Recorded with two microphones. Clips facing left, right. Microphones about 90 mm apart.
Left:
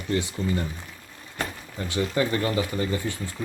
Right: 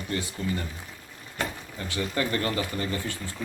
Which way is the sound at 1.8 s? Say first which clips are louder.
Left 4 dB; 20° left (ahead or behind).